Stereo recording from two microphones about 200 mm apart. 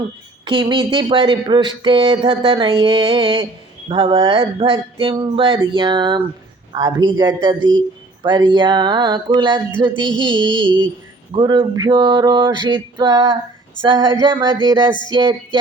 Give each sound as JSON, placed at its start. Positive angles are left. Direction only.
{"t": 0.4, "sound": "speech", "side_deg": -25}